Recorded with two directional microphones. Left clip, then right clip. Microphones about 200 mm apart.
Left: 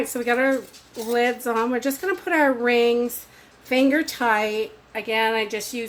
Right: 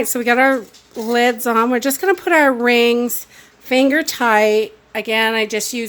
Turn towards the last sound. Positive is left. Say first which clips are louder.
# right 6 dB
turn(degrees=-55)  # may be behind; listen again after turning